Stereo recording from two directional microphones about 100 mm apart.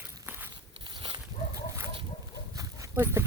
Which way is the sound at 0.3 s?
20° right (ahead or behind).